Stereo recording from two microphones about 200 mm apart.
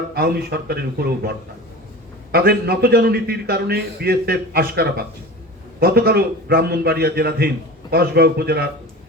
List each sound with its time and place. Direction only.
0.1 s a man's voice: 50° right (ahead or behind)
2.3 s a man's voice: 50° right (ahead or behind)